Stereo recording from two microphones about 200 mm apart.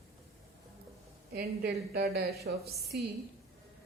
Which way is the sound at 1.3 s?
50° right (ahead or behind).